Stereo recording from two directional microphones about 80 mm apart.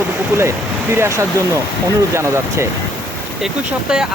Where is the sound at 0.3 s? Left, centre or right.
Right.